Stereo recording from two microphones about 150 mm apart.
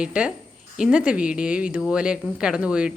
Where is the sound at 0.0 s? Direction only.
5° right (ahead or behind).